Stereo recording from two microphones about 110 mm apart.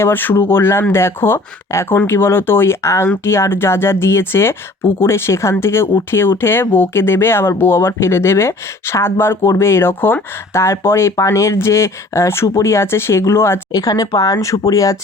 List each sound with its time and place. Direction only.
0.0 s speech: 15° left (ahead or behind)
13.7 s speech: 35° left (ahead or behind)